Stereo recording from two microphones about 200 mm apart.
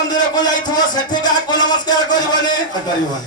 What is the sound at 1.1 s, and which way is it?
Music, 20° left (ahead or behind).